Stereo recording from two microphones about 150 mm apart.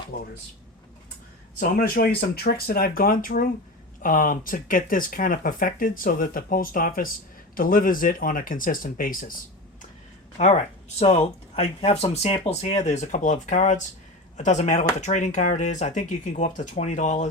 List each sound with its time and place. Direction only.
0.1 s speech: 90° left
1.5 s speech: 85° left; by 9.3 s 70° left (ahead or behind)
10.3 s speech: 45° left (ahead or behind)